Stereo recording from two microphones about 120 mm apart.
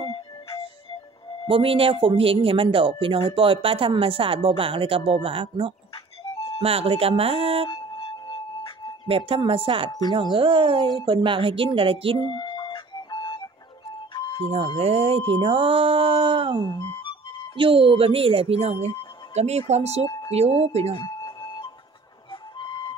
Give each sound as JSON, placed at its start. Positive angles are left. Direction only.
{"t": 0.0, "sound": "music", "side_deg": 45}
{"t": 1.5, "sound": "speech", "side_deg": -50}
{"t": 7.7, "sound": "music", "side_deg": 45}
{"t": 9.0, "sound": "speech", "side_deg": -50}
{"t": 9.8, "sound": "speech", "side_deg": 35}
{"t": 10.3, "sound": "speech", "side_deg": -40}
{"t": 12.2, "sound": "music", "side_deg": 40}
{"t": 14.8, "sound": "speech", "side_deg": -55}
{"t": 21.2, "sound": "music", "side_deg": 40}